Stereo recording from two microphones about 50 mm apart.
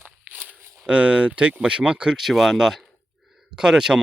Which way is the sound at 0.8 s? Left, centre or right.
Right.